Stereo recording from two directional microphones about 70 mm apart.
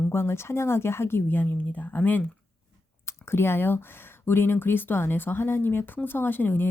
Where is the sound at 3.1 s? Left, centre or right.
Left.